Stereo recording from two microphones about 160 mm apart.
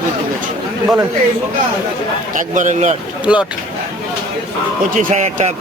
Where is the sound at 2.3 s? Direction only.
55° right (ahead or behind).